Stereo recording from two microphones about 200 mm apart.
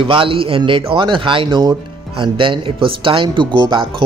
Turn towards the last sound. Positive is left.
turn(degrees=-25)  # may be behind; listen again after turning